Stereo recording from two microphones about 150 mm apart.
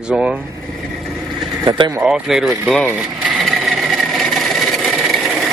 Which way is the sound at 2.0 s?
5° right (ahead or behind).